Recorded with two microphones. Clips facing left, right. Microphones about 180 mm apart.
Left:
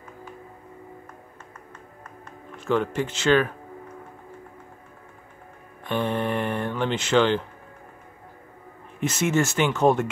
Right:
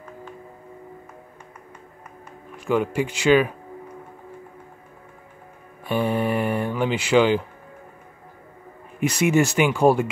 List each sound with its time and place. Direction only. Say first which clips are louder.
2.5 s speech: right 2 dB; 10° right (ahead or behind)
5.9 s speech: right 3 dB; 10° right (ahead or behind)
9.0 s speech: right 4 dB; 15° right (ahead or behind)